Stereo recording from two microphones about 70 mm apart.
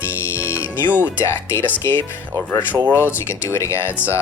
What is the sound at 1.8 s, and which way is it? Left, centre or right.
Speech, left.